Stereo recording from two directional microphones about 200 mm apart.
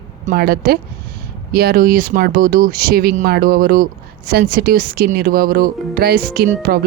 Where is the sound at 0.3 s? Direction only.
50° right (ahead or behind).